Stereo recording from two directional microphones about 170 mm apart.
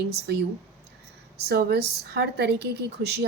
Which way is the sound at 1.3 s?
70° right (ahead or behind).